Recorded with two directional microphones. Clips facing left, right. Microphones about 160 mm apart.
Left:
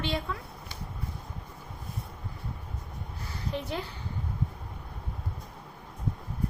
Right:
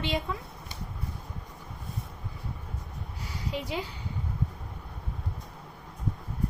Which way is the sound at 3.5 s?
10° right (ahead or behind).